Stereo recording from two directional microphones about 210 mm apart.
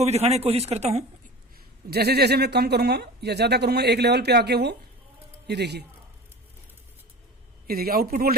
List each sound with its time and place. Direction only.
0.0 s speech: 30° right (ahead or behind)
1.9 s speech: 50° right (ahead or behind)
7.7 s speech: 45° right (ahead or behind)